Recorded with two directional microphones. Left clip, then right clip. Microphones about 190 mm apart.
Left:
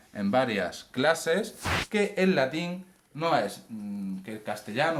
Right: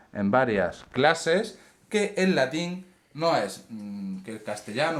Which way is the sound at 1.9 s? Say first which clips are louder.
Right 3 dB; 25° right (ahead or behind).